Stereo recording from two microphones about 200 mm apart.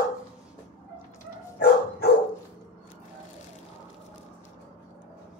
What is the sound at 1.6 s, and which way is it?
Dog, 55° left (ahead or behind).